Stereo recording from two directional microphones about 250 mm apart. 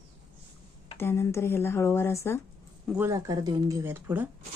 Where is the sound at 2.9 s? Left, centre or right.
Centre.